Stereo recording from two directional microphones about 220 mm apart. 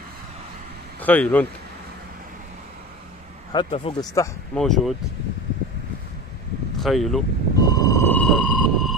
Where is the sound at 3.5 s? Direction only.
20° left (ahead or behind).